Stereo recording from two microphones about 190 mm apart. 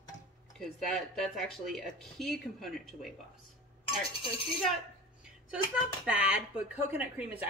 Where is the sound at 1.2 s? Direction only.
Centre (ahead or behind).